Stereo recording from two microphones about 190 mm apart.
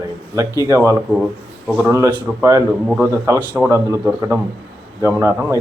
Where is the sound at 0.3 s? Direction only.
15° right (ahead or behind).